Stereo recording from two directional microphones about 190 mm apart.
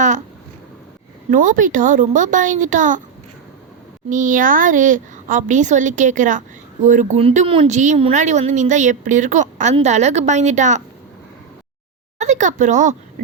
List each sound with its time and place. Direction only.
1.3 s speech: 45° right (ahead or behind)
4.1 s speech: 40° right (ahead or behind)
12.2 s speech: 40° right (ahead or behind)